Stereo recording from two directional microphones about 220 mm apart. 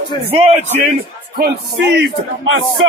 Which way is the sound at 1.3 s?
50° right (ahead or behind).